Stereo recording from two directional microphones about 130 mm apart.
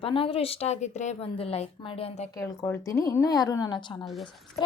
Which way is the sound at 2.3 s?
25° left (ahead or behind).